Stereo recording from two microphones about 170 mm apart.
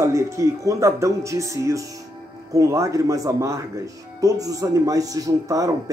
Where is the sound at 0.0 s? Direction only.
15° right (ahead or behind).